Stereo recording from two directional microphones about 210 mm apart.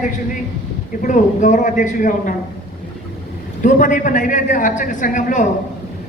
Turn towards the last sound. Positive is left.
turn(degrees=40)  # may be behind; listen again after turning